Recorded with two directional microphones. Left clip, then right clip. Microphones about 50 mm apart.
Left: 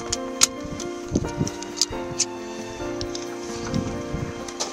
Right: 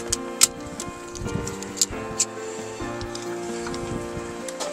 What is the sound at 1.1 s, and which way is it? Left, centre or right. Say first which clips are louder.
Music: left 4 dB; left.